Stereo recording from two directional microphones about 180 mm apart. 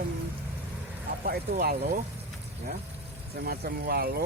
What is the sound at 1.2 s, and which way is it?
Speech, 55° right (ahead or behind).